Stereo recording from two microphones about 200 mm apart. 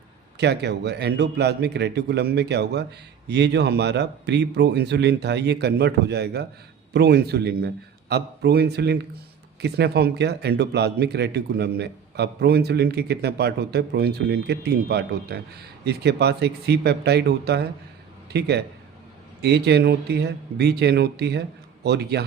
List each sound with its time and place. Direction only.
0.3 s a man's voice: 55° right (ahead or behind)